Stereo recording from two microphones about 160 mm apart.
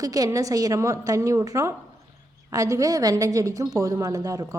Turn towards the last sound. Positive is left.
turn(degrees=-20)  # may be behind; listen again after turning